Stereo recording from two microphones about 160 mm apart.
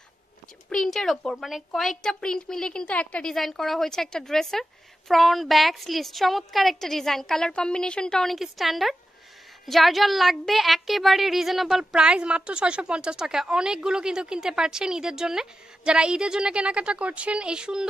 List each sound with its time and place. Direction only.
0.7 s a woman's voice: centre (ahead or behind)